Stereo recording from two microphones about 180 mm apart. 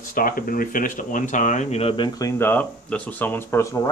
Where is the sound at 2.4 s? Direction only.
10° left (ahead or behind).